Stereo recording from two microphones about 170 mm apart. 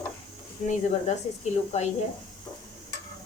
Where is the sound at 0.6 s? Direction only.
40° left (ahead or behind).